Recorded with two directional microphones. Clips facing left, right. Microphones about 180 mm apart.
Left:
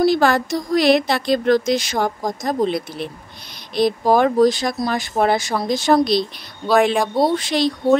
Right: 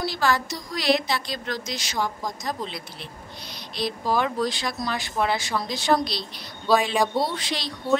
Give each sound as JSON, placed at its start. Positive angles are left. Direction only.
{"t": 0.0, "sound": "speech", "side_deg": 55}
{"t": 6.7, "sound": "speech", "side_deg": 55}